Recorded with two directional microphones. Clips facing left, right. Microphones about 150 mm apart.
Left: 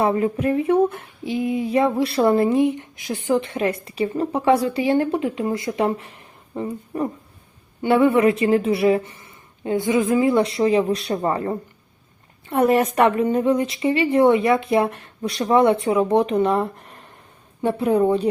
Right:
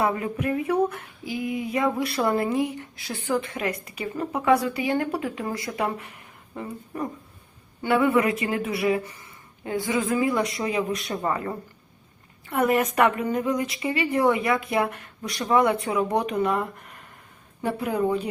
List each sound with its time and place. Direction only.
0.0 s female singing: 30° left (ahead or behind)